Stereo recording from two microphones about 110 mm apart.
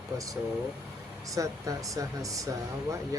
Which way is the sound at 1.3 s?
30° right (ahead or behind).